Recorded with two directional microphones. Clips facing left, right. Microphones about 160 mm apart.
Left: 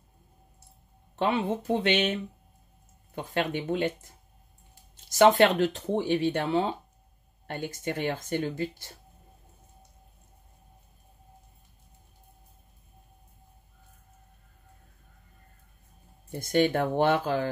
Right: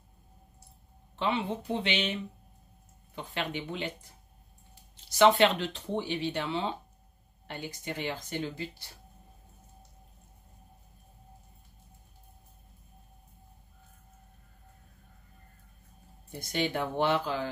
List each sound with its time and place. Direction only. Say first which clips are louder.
1.1 s speech: left 4 dB; 50° left (ahead or behind)
3.2 s speech: left 6 dB; 45° left (ahead or behind)
5.1 s speech: left 3 dB; 45° left (ahead or behind)
16.3 s speech: left 8 dB; 50° left (ahead or behind)